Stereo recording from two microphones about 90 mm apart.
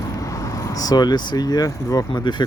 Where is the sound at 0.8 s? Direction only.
50° left (ahead or behind).